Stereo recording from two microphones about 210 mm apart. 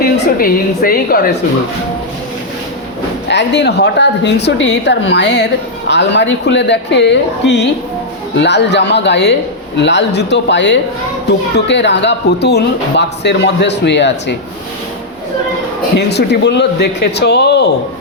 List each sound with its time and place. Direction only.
0.0 s speech: 45° left (ahead or behind)
3.2 s speech: 55° left (ahead or behind)
16.0 s speech: 55° left (ahead or behind)